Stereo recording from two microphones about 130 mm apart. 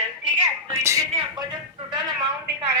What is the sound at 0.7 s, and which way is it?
Speech, 25° right (ahead or behind).